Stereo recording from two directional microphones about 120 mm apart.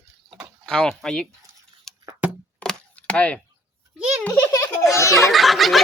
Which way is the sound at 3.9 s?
10° right (ahead or behind).